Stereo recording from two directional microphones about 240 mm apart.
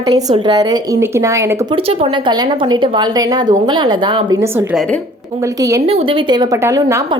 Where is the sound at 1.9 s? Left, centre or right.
Right.